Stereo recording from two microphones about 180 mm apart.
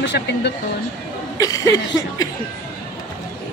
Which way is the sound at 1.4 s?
20° left (ahead or behind).